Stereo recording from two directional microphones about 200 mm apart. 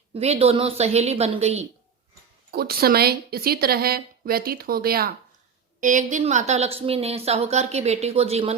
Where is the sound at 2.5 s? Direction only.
50° right (ahead or behind).